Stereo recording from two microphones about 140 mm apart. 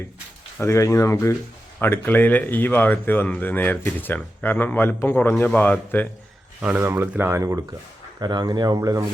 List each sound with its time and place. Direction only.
0.6 s speech: 20° left (ahead or behind)
6.6 s speech: 10° right (ahead or behind)